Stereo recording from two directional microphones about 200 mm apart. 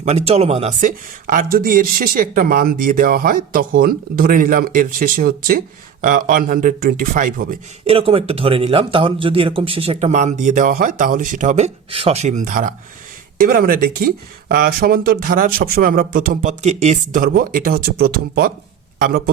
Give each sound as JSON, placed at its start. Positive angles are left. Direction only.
{"t": 0.0, "sound": "speech", "side_deg": -30}
{"t": 7.9, "sound": "a man's voice", "side_deg": -30}